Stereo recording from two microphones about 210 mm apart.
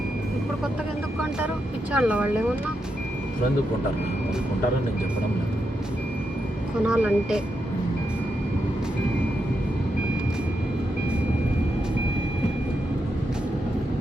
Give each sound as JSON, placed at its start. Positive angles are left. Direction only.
{"t": 1.9, "sound": "speech", "side_deg": -5}
{"t": 6.9, "sound": "speech", "side_deg": -5}